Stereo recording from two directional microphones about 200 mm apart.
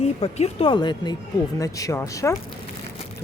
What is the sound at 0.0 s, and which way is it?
Speech, 30° left (ahead or behind).